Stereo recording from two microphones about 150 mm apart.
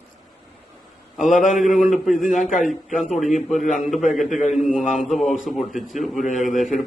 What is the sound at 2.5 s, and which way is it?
Speech, 55° left (ahead or behind).